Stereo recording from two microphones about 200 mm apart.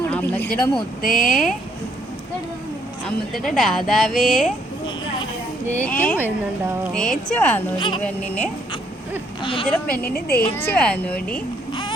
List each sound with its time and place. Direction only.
0.1 s speech: 10° left (ahead or behind)
1.0 s a woman's voice: 40° left (ahead or behind)
1.3 s speech: centre (ahead or behind)
3.3 s speech: centre (ahead or behind)
5.7 s a woman's voice: 10° left (ahead or behind)
7.8 s speech: 25° left (ahead or behind)
8.0 s a woman's voice: 5° left (ahead or behind)
9.4 s speech: 25° left (ahead or behind)
9.6 s a woman's voice: 5° left (ahead or behind)
9.9 s a woman's voice: 50° left (ahead or behind)
10.5 s a woman's voice: 10° left (ahead or behind)